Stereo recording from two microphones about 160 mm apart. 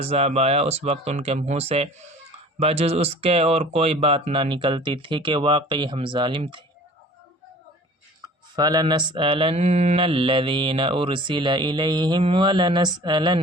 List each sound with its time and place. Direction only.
0.0 s mantra: 40° right (ahead or behind)
8.5 s mantra: 25° right (ahead or behind)